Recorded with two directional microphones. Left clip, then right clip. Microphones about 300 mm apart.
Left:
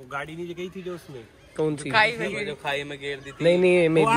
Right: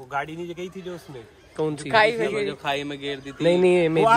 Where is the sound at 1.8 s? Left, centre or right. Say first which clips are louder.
Right 3 dB; right.